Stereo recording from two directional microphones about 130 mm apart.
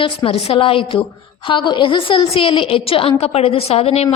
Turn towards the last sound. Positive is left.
turn(degrees=55)  # may be behind; listen again after turning